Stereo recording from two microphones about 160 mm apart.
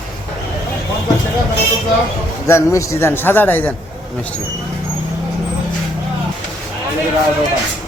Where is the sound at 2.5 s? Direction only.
20° left (ahead or behind).